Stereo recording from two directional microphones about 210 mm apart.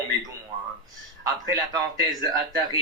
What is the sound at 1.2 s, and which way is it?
A man's voice, 20° right (ahead or behind).